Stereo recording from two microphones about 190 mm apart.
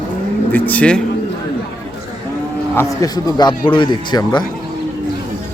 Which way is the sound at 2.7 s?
15° left (ahead or behind).